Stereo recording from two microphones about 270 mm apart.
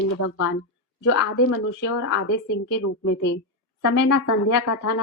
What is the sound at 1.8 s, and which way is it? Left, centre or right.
Speech, left.